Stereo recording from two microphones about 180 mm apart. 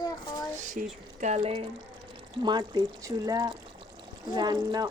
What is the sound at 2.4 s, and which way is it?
Speech, 25° right (ahead or behind).